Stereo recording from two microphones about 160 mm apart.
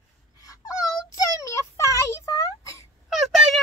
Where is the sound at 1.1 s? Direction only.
20° left (ahead or behind).